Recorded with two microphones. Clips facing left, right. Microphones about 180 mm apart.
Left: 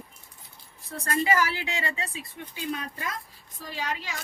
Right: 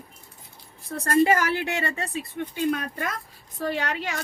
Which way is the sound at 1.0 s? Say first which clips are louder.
Right 5 dB; 50° right (ahead or behind).